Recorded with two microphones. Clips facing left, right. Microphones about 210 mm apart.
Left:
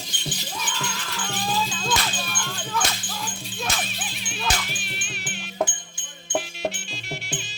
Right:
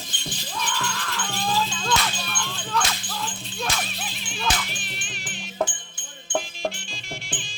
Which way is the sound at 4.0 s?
Centre (ahead or behind).